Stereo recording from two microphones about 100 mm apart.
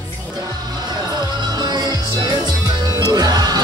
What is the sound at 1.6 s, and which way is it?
Music, 45° right (ahead or behind).